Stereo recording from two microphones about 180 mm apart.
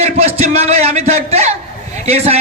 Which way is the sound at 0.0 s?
35° right (ahead or behind).